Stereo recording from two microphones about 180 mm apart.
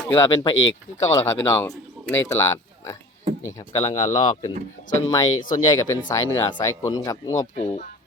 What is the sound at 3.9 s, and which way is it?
Speech, 40° left (ahead or behind).